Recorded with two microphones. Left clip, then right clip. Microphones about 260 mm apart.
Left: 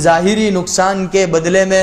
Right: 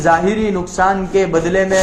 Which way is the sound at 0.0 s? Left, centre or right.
Left.